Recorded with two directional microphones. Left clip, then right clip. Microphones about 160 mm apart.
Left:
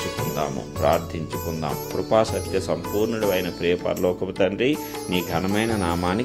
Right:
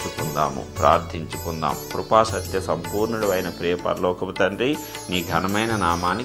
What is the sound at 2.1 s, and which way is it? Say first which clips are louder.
Speech: right 2 dB; 35° left (ahead or behind).